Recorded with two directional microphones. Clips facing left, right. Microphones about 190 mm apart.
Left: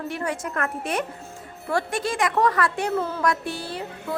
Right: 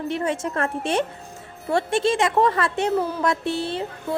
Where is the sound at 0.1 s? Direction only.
25° right (ahead or behind).